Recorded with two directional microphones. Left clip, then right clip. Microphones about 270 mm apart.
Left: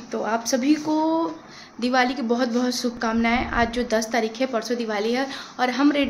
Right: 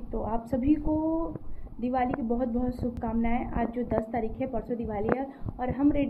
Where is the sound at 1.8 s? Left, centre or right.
Centre.